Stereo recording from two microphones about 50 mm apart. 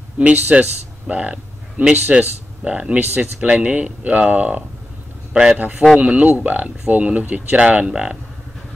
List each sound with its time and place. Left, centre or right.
0.2 s speech: right
5.3 s a man's voice: centre
5.6 s speech: right